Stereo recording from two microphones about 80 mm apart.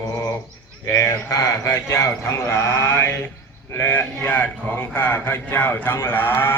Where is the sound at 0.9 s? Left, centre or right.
Left.